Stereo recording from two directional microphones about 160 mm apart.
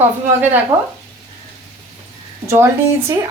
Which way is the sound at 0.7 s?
30° right (ahead or behind).